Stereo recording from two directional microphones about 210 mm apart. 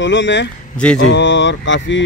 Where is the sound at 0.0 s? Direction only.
60° left (ahead or behind).